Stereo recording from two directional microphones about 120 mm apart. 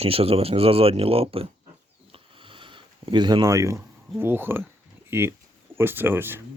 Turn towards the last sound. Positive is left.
turn(degrees=-20)  # may be behind; listen again after turning